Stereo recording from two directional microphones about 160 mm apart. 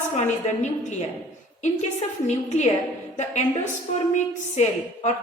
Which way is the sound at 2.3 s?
45° left (ahead or behind).